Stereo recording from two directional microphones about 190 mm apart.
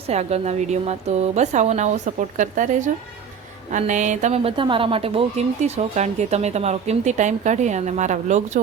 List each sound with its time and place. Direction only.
0.1 s a woman's voice: 35° right (ahead or behind)